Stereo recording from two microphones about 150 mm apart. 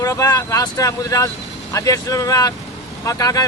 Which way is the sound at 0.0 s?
25° left (ahead or behind).